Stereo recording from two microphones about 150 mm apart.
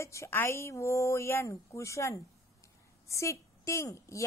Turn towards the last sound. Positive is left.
turn(degrees=20)  # may be behind; listen again after turning